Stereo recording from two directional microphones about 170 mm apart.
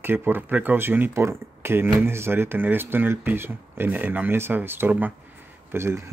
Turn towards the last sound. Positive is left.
turn(degrees=-15)  # may be behind; listen again after turning